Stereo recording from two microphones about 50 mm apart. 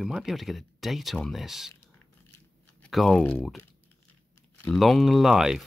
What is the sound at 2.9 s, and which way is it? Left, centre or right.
Speech, centre.